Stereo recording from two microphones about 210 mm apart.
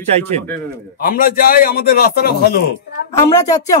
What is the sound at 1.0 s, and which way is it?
A man's voice, 45° left (ahead or behind).